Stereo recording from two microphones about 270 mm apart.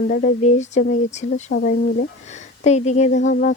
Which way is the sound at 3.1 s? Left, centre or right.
Left.